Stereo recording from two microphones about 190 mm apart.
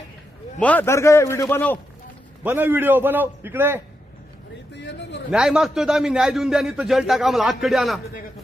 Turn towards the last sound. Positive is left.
turn(degrees=0)  # may be behind; listen again after turning